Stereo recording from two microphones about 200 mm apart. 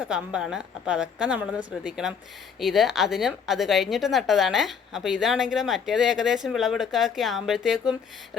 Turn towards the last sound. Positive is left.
turn(degrees=0)  # may be behind; listen again after turning